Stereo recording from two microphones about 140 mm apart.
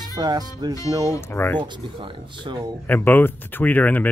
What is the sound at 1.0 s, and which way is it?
Speech, 20° left (ahead or behind).